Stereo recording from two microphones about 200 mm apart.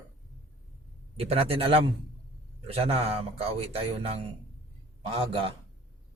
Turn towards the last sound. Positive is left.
turn(degrees=-25)  # may be behind; listen again after turning